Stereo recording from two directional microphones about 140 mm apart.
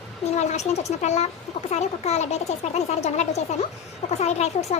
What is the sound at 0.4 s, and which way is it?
Speech, 55° left (ahead or behind).